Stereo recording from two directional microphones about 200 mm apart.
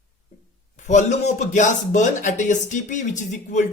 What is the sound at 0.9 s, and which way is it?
Speech, 35° left (ahead or behind).